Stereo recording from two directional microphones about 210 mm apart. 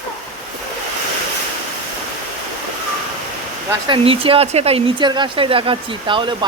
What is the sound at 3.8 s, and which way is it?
Speech, 25° right (ahead or behind).